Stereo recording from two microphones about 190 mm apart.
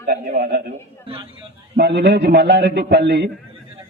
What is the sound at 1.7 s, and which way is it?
A man's voice, 60° right (ahead or behind).